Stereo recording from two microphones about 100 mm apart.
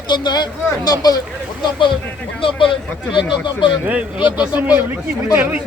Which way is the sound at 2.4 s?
60° left (ahead or behind).